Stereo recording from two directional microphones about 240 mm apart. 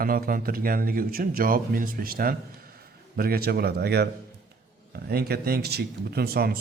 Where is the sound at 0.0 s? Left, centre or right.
Right.